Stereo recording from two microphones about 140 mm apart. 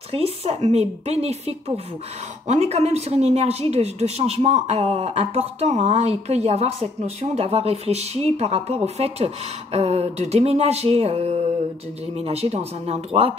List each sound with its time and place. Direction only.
0.1 s speech: 45° right (ahead or behind)